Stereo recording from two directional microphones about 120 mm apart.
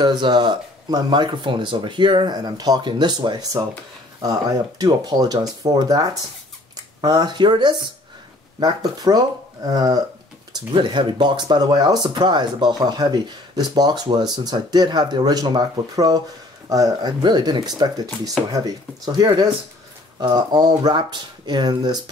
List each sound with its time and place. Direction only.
0.0 s speech: 40° right (ahead or behind)